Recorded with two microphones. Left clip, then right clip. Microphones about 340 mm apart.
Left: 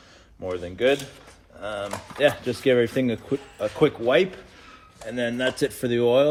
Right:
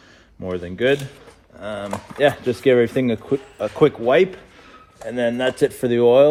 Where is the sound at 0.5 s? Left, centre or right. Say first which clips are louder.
Right 3 dB; right.